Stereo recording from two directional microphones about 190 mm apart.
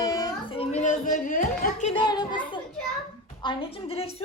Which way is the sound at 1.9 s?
20° left (ahead or behind).